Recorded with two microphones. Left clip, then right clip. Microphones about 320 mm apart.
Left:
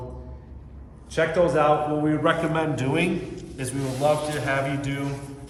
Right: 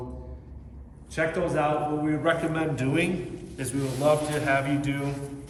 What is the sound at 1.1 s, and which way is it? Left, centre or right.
A man's voice, centre.